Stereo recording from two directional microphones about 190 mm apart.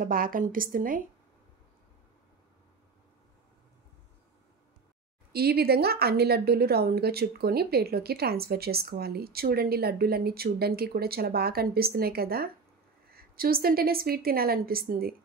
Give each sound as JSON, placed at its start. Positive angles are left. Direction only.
{"t": 0.0, "sound": "a woman's voice", "side_deg": -50}
{"t": 5.3, "sound": "a woman's voice", "side_deg": -55}